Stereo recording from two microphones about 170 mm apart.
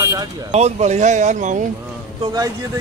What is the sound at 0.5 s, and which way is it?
Speech, 40° right (ahead or behind).